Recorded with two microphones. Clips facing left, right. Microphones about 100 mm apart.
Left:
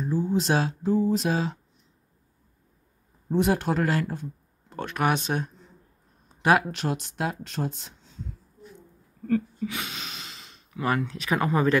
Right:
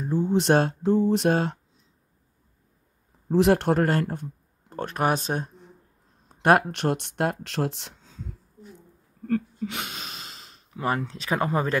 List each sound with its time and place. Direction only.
0.3 s speech: 60° right (ahead or behind)
3.3 s speech: 75° right (ahead or behind); by 5.5 s 40° right (ahead or behind)
6.2 s speech: 55° right (ahead or behind); by 7.9 s 80° right
9.3 s a sound: 50° right (ahead or behind)
11.0 s speech: 30° right (ahead or behind)